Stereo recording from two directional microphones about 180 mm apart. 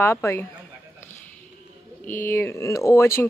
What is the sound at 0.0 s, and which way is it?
Speech, 15° left (ahead or behind).